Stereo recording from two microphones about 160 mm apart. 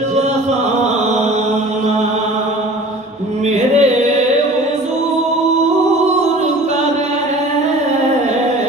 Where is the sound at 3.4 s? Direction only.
45° right (ahead or behind).